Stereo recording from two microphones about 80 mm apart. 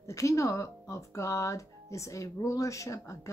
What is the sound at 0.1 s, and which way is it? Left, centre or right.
Speech, left.